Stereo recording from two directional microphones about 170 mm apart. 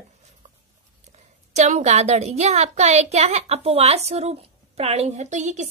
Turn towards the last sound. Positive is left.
turn(degrees=-45)  # may be behind; listen again after turning